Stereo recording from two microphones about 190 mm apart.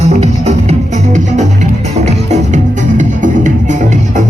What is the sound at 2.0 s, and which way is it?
Music, 35° right (ahead or behind).